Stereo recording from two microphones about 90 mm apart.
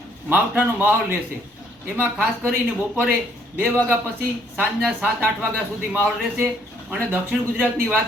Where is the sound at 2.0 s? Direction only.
20° right (ahead or behind).